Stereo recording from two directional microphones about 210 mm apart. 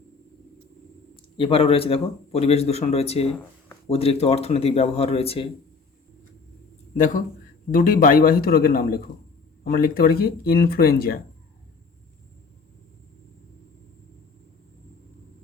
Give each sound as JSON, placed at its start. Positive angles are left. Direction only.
{"t": 1.1, "sound": "speech", "side_deg": 25}
{"t": 6.9, "sound": "a man's voice", "side_deg": 35}